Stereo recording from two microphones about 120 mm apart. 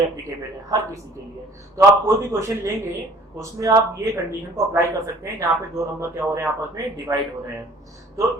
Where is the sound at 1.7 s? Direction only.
25° right (ahead or behind).